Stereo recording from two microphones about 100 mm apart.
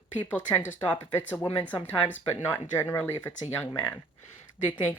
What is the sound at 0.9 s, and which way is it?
Speech, 15° left (ahead or behind).